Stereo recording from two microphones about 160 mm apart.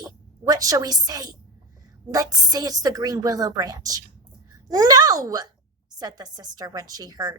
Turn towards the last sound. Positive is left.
turn(degrees=-25)  # may be behind; listen again after turning